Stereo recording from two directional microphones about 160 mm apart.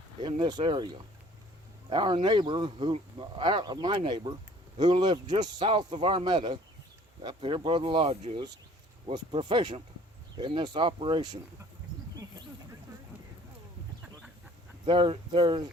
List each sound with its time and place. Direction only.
0.2 s speech: 25° right (ahead or behind)
14.8 s speech: 30° right (ahead or behind)